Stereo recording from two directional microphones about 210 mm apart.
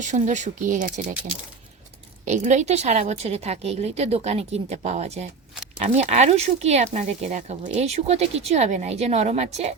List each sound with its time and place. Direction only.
0.0 s speech: 35° right (ahead or behind)
2.2 s speech: 35° right (ahead or behind)